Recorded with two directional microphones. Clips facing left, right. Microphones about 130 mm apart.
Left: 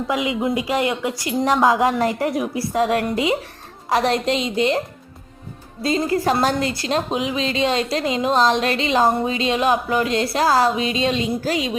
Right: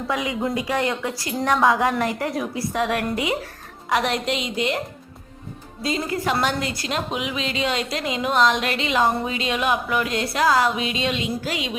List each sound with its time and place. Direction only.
0.1 s a woman's voice: 20° left (ahead or behind)
5.8 s a woman's voice: 35° left (ahead or behind)